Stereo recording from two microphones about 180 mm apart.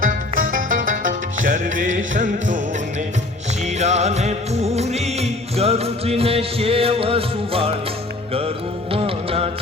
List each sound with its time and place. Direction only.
0.0 s music: 50° right (ahead or behind)
3.8 s music: 40° right (ahead or behind)
8.9 s music: 30° right (ahead or behind)